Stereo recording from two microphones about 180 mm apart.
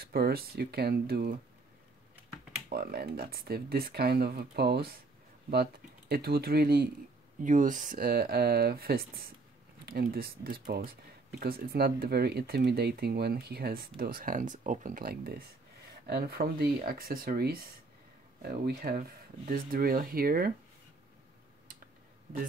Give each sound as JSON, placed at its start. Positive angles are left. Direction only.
{"t": 0.0, "sound": "speech", "side_deg": -60}
{"t": 2.7, "sound": "speech", "side_deg": -60}
{"t": 7.4, "sound": "speech", "side_deg": -45}